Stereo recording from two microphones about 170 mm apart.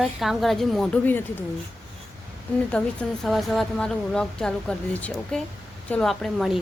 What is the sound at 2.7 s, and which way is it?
A woman's voice, 5° left (ahead or behind).